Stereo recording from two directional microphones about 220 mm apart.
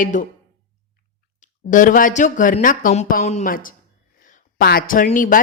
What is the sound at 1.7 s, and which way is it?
Speech, 35° left (ahead or behind).